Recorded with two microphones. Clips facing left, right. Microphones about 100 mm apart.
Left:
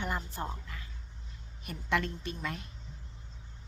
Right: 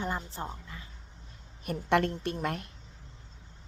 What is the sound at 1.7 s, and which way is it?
Speech, 55° right (ahead or behind).